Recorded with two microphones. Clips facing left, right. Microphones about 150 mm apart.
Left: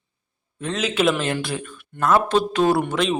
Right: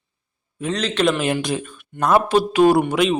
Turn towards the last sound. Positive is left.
turn(degrees=-5)  # may be behind; listen again after turning